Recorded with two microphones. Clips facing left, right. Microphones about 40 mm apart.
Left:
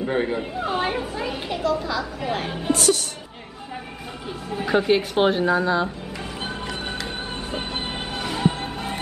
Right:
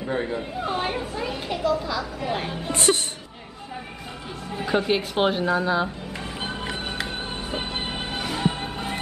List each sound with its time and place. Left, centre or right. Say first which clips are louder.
0.0 s speech: left 3 dB; left
0.6 s speech: left 2 dB; centre
2.7 s speech: left 2 dB; right
4.5 s speech: left 3 dB; centre
7.1 s music: left 1 dB; centre